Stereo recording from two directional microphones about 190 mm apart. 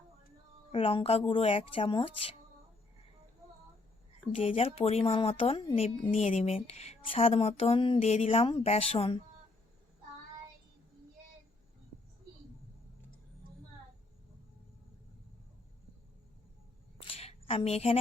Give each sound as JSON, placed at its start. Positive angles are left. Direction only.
{"t": 0.7, "sound": "speech", "side_deg": 30}
{"t": 4.3, "sound": "speech", "side_deg": 30}
{"t": 17.1, "sound": "a sound", "side_deg": 30}